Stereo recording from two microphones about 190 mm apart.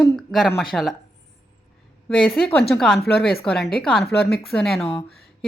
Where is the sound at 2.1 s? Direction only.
5° left (ahead or behind).